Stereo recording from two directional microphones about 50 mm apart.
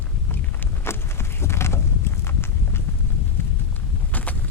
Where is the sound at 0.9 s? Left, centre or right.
Left.